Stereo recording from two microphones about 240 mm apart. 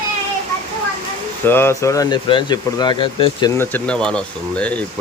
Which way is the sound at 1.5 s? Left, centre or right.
Centre.